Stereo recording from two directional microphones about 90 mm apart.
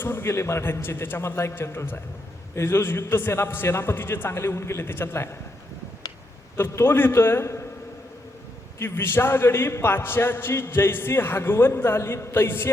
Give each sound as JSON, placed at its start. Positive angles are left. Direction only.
{"t": 0.0, "sound": "a man's voice", "side_deg": 25}
{"t": 6.6, "sound": "a man's voice", "side_deg": 25}
{"t": 8.8, "sound": "a man's voice", "side_deg": 25}